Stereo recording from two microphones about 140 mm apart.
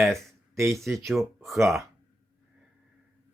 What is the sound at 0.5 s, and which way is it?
Speech, 20° right (ahead or behind).